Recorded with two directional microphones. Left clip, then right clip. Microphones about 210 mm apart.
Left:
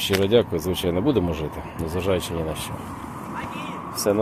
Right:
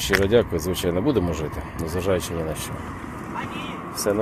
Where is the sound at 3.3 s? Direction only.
55° left (ahead or behind).